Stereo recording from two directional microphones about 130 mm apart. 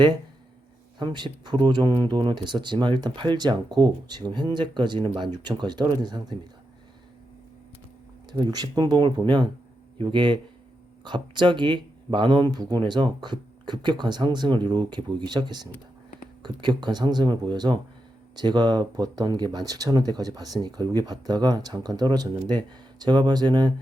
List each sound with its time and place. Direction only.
0.9 s speech: 35° right (ahead or behind)
8.3 s speech: 30° right (ahead or behind)